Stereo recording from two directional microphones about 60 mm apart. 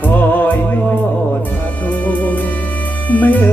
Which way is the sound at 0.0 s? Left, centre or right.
Left.